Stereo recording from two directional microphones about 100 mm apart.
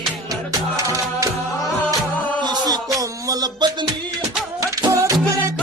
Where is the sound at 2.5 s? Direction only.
35° right (ahead or behind).